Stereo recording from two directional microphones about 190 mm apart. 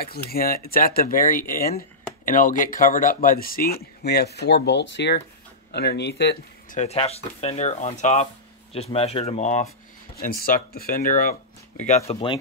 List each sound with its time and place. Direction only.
0.0 s speech: 55° left (ahead or behind)
6.7 s speech: 35° left (ahead or behind)
12.1 s speech: 25° left (ahead or behind)